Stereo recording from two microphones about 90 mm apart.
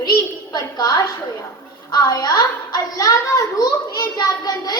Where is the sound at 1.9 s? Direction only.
45° left (ahead or behind).